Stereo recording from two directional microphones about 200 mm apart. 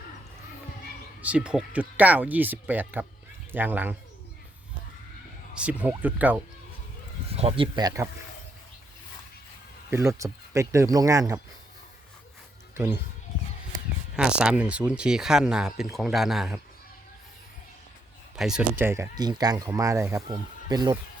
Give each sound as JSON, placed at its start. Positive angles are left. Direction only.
{"t": 1.2, "sound": "speech", "side_deg": -5}
{"t": 5.5, "sound": "speech", "side_deg": -5}
{"t": 7.3, "sound": "speech", "side_deg": -30}
{"t": 9.9, "sound": "speech", "side_deg": -15}
{"t": 12.7, "sound": "speech", "side_deg": -10}
{"t": 14.2, "sound": "speech", "side_deg": -5}
{"t": 18.3, "sound": "speech", "side_deg": -5}